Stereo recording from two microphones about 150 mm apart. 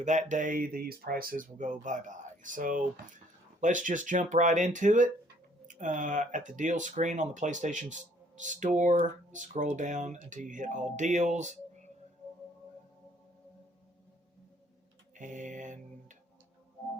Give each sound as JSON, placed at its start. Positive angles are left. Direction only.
{"t": 0.0, "sound": "speech", "side_deg": -55}
{"t": 15.1, "sound": "mantra", "side_deg": -55}